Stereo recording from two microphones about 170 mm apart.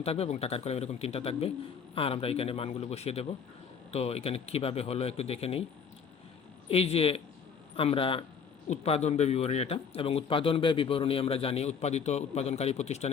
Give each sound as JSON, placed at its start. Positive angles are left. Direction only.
{"t": 0.0, "sound": "a man's voice", "side_deg": 35}
{"t": 6.7, "sound": "a man's voice", "side_deg": 35}